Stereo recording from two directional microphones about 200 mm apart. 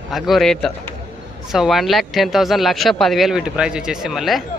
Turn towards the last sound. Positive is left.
turn(degrees=0)  # may be behind; listen again after turning